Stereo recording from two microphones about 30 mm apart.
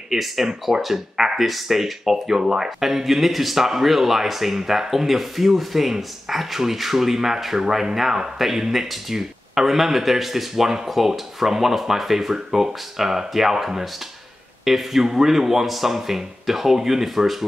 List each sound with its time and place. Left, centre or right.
0.1 s speech: centre
1.1 s a sound: centre
1.4 s speech: centre